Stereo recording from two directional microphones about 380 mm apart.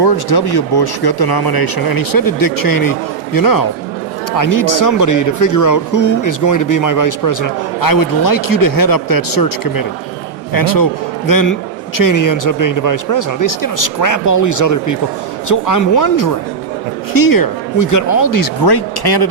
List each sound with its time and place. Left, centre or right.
0.0 s speech: left